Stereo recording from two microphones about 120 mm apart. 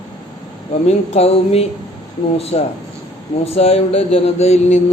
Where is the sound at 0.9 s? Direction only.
60° left (ahead or behind).